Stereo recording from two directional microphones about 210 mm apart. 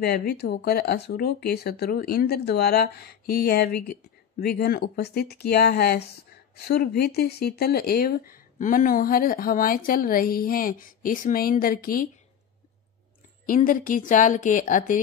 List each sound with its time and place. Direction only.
0.0 s speech: 50° left (ahead or behind)
13.5 s a woman's voice: 40° left (ahead or behind)